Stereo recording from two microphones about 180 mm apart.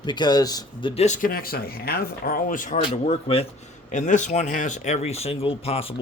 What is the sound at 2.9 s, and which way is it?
Speech, 35° left (ahead or behind).